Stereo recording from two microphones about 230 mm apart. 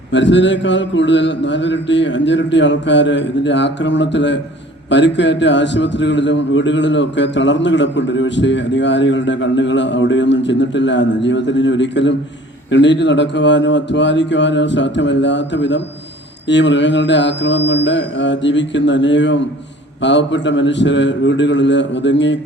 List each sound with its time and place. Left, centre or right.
0.1 s a man's voice: left